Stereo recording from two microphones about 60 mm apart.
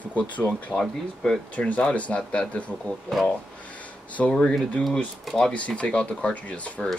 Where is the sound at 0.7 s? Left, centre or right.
Centre.